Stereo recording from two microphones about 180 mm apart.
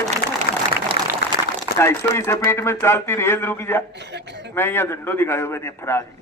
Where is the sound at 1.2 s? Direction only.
60° left (ahead or behind).